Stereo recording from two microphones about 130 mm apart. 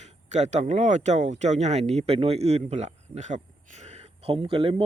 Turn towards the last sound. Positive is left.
turn(degrees=-45)  # may be behind; listen again after turning